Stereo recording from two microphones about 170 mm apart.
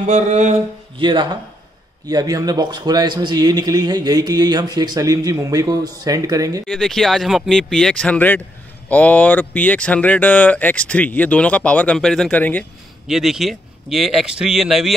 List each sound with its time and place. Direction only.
0.0 s a sound: 45° right (ahead or behind)
0.9 s a man's voice: 30° right (ahead or behind)
6.7 s speech: centre (ahead or behind)
13.0 s speech: centre (ahead or behind)